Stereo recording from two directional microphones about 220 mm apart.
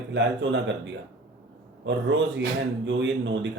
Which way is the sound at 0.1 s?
55° right (ahead or behind).